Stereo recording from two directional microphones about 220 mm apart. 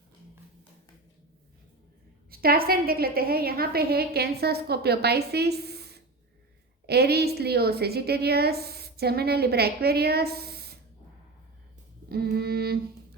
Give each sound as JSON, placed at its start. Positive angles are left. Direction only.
{"t": 2.3, "sound": "a woman's voice", "side_deg": -45}
{"t": 12.0, "sound": "music", "side_deg": -45}